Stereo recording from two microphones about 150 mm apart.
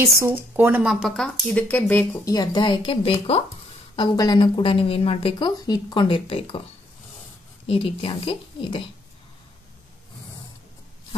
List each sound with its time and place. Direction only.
0.0 s speech: 15° right (ahead or behind)
0.8 s speech: centre (ahead or behind)
2.2 s a woman's voice: 25° left (ahead or behind)
7.6 s a woman's voice: 40° left (ahead or behind)